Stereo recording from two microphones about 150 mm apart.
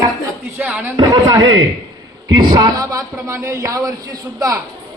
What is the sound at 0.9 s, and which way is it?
A man's voice, 30° right (ahead or behind).